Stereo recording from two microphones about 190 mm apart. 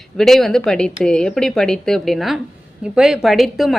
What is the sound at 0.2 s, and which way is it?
A woman's voice, centre (ahead or behind).